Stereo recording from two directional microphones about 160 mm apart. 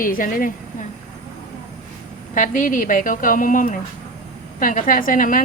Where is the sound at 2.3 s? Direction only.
55° left (ahead or behind).